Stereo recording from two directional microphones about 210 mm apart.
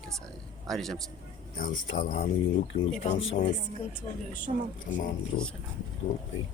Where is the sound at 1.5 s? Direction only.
40° left (ahead or behind).